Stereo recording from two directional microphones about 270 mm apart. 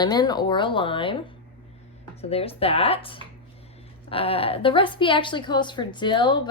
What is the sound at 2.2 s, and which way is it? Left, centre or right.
A woman's voice, left.